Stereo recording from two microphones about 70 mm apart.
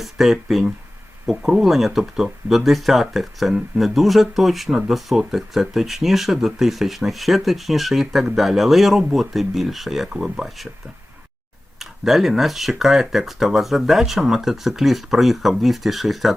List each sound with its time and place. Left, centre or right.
0.0 s speech: centre
11.8 s speech: centre